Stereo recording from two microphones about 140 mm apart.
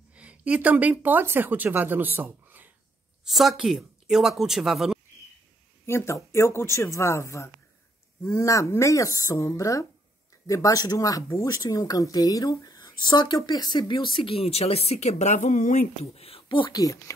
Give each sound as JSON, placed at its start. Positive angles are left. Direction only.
{"t": 0.1, "sound": "speech", "side_deg": -10}
{"t": 3.3, "sound": "speech", "side_deg": 0}
{"t": 5.9, "sound": "speech", "side_deg": 20}
{"t": 16.2, "sound": "speech", "side_deg": 40}